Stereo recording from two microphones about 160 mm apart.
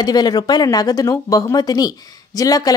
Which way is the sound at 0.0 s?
25° left (ahead or behind).